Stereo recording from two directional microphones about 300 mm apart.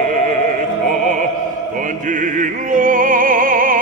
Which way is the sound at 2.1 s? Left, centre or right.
Right.